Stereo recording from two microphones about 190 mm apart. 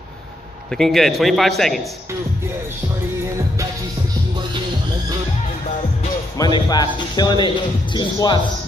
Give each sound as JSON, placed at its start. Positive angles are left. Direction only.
{"t": 0.7, "sound": "a man's voice", "side_deg": 0}
{"t": 6.3, "sound": "speech", "side_deg": 20}